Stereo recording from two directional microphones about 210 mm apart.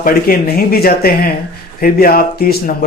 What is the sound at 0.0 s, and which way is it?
Speech, 45° left (ahead or behind).